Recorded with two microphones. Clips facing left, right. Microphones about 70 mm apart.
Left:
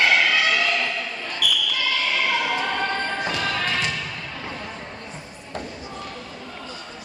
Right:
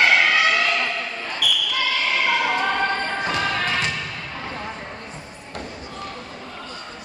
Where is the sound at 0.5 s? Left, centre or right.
Right.